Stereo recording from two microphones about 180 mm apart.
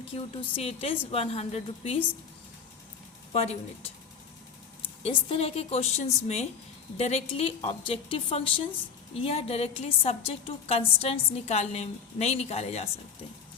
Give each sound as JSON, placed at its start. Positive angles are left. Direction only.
{"t": 0.1, "sound": "a woman's voice", "side_deg": 35}
{"t": 3.3, "sound": "a woman's voice", "side_deg": 35}
{"t": 5.0, "sound": "a woman's voice", "side_deg": 30}